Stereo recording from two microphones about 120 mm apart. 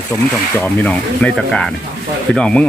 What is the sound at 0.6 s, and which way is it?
Speech, 10° left (ahead or behind).